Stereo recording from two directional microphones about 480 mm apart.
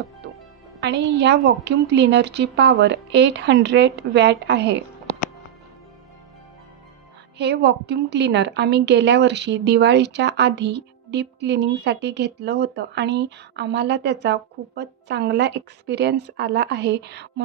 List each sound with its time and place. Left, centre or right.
0.7 s a woman's voice: right
7.3 s a woman's voice: right